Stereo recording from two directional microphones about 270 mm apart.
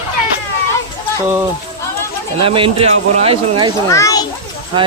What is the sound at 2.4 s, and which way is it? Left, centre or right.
Speech, centre.